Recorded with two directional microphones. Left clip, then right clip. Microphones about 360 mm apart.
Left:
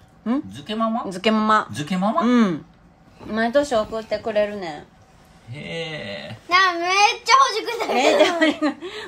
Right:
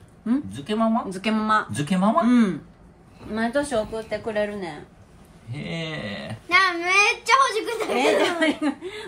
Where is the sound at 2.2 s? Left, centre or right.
Left.